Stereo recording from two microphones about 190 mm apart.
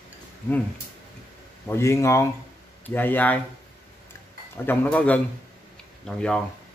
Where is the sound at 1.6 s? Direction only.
15° left (ahead or behind).